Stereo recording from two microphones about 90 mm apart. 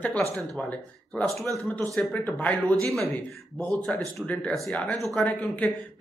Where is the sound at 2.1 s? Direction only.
20° left (ahead or behind).